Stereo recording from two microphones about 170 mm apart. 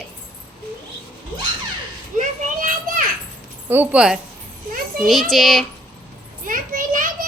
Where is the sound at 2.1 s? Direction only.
50° right (ahead or behind).